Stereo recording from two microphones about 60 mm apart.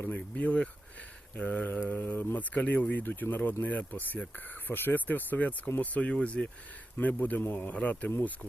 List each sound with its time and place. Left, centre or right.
0.0 s speech: left